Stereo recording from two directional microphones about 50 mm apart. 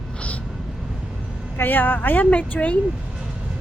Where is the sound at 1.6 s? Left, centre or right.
Left.